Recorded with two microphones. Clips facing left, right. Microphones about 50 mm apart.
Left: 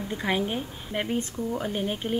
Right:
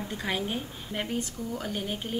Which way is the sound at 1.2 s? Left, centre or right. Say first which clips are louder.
Left 4 dB; left.